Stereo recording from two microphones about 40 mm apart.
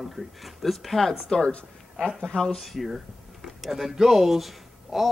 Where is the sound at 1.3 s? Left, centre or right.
Centre.